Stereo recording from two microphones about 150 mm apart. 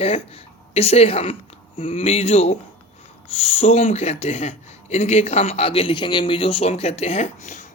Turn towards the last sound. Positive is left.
turn(degrees=55)  # may be behind; listen again after turning